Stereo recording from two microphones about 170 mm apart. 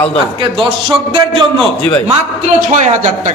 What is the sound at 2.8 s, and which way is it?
Speech, 45° right (ahead or behind).